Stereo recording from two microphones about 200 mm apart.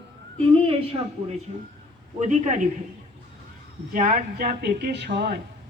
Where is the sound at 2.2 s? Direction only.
35° right (ahead or behind).